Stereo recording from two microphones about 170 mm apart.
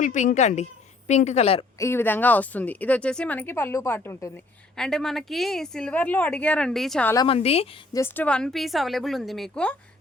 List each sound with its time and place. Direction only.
0.0 s a woman's voice: 50° left (ahead or behind)
1.8 s speech: 15° left (ahead or behind)
4.8 s speech: 5° left (ahead or behind)
7.3 s speech: 35° left (ahead or behind)
7.9 s speech: 10° left (ahead or behind)